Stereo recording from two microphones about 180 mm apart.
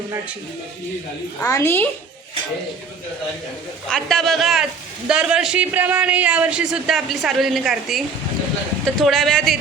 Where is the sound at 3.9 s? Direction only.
5° left (ahead or behind).